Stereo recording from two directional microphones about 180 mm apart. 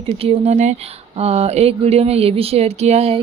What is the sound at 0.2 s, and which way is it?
A woman's voice, 35° right (ahead or behind).